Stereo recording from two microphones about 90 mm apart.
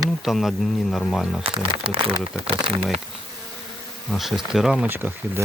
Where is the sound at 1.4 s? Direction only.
75° right (ahead or behind).